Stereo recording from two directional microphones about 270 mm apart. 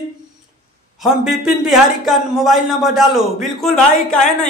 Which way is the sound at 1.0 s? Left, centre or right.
Centre.